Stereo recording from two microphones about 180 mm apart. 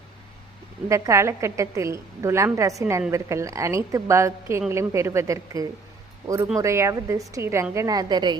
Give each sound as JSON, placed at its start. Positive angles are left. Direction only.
{"t": 0.9, "sound": "a woman's voice", "side_deg": -15}